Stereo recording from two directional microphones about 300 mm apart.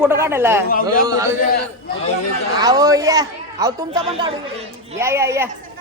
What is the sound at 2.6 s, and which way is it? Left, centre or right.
Speech, centre.